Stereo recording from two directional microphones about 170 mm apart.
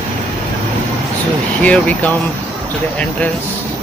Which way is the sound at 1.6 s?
5° left (ahead or behind).